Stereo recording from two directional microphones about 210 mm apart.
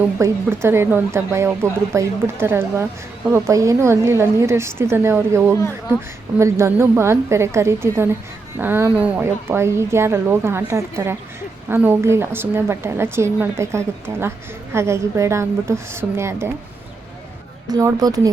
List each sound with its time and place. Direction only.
0.2 s a woman's voice: 10° right (ahead or behind)
17.7 s a woman's voice: 15° right (ahead or behind)